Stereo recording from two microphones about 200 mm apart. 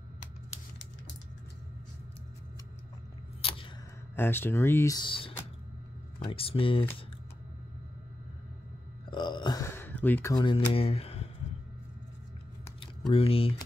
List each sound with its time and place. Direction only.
3.4 s a sound: 30° left (ahead or behind)
4.1 s speech: 10° left (ahead or behind); by 6.9 s 25° left (ahead or behind)
9.1 s burping: 25° left (ahead or behind)
10.3 s speech: 25° left (ahead or behind)
13.1 s speech: 30° left (ahead or behind)